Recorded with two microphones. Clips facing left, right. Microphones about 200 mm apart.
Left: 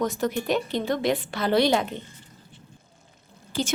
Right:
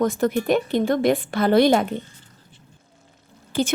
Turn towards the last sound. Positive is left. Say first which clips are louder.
# right 5 dB
turn(degrees=-55)  # may be behind; listen again after turning